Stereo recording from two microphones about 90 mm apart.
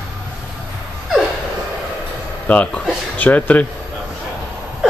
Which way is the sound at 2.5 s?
15° left (ahead or behind).